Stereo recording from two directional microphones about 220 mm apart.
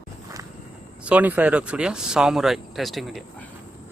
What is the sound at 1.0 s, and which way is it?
Speech, 5° right (ahead or behind).